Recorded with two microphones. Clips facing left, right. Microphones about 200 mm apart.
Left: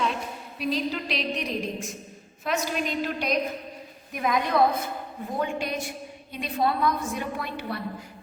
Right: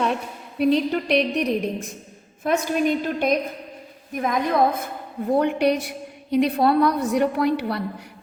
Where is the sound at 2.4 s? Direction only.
50° right (ahead or behind).